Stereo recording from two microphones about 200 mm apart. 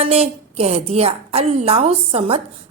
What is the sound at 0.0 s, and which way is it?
A woman's voice, 30° right (ahead or behind).